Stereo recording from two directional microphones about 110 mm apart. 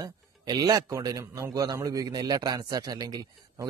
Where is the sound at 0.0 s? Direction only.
35° right (ahead or behind).